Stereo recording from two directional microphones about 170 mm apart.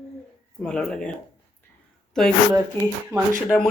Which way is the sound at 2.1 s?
5° left (ahead or behind).